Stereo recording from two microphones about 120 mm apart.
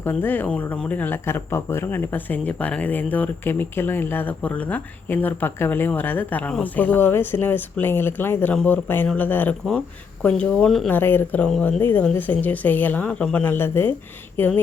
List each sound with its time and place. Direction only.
0.0 s speech: 15° left (ahead or behind)
10.8 s speech: 15° left (ahead or behind)
11.8 s speech: 15° left (ahead or behind)